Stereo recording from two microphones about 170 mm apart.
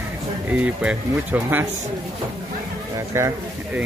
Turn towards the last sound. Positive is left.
turn(degrees=-15)  # may be behind; listen again after turning